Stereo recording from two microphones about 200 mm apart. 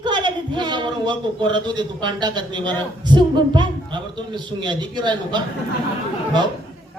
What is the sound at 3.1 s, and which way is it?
A man's voice, 20° right (ahead or behind).